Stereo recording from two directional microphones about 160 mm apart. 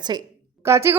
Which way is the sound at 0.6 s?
20° right (ahead or behind).